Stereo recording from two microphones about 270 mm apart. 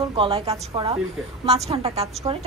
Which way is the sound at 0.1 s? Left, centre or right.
Centre.